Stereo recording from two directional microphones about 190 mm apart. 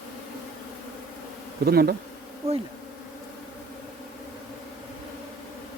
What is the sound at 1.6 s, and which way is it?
Speech, 55° right (ahead or behind).